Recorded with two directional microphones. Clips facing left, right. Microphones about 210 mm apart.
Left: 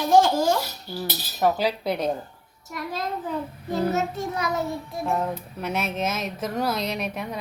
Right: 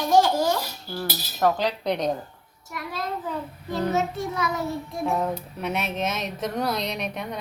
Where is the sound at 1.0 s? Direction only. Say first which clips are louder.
Even; 5° left (ahead or behind).